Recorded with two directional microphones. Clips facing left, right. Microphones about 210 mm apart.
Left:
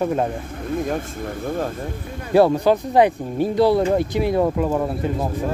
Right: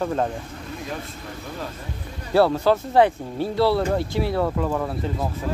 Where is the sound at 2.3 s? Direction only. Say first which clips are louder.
Left 3 dB; 15° left (ahead or behind).